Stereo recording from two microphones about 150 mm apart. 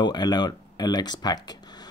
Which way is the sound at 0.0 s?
30° left (ahead or behind).